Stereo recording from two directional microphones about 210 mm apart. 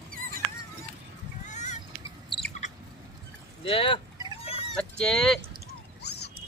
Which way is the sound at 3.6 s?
25° left (ahead or behind).